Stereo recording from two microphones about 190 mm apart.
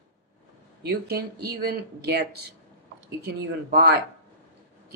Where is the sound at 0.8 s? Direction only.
55° right (ahead or behind).